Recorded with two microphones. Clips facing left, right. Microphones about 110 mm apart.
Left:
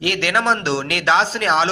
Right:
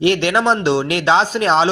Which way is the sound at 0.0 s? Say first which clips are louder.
Right 5 dB; 25° right (ahead or behind).